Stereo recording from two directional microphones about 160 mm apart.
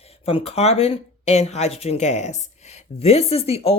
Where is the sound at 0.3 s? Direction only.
40° left (ahead or behind).